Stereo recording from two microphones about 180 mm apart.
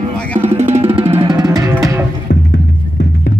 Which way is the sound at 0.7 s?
35° right (ahead or behind).